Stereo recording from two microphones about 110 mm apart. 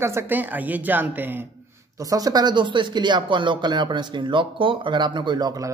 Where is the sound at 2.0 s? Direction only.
35° right (ahead or behind).